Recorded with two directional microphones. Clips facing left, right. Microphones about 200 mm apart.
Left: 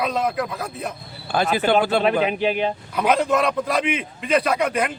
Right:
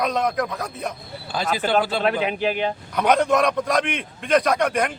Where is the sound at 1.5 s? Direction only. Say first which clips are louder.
Left 2 dB; 55° left (ahead or behind).